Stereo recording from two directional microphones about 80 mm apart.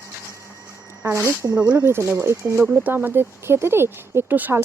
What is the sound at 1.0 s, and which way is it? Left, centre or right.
Speech, right.